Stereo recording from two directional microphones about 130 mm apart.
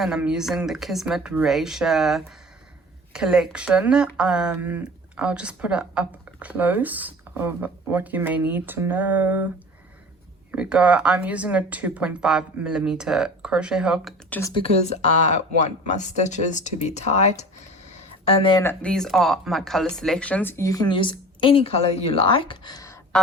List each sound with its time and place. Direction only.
0.0 s speech: 5° right (ahead or behind)
10.5 s speech: 10° right (ahead or behind)
14.5 s speech: 50° left (ahead or behind)
15.3 s speech: 65° left (ahead or behind)
18.6 s speech: 15° left (ahead or behind)